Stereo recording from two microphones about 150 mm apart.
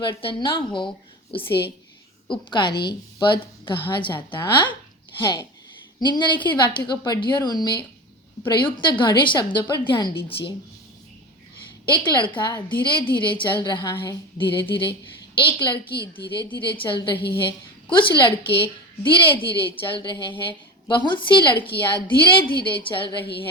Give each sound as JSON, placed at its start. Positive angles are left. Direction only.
{"t": 0.2, "sound": "a woman's voice", "side_deg": 35}
{"t": 2.3, "sound": "a woman's voice", "side_deg": 30}
{"t": 11.9, "sound": "a woman's voice", "side_deg": 30}